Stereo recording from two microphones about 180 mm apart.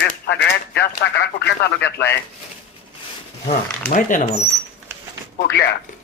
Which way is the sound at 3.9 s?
45° left (ahead or behind).